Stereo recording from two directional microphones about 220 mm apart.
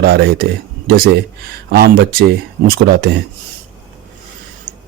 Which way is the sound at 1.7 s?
45° right (ahead or behind).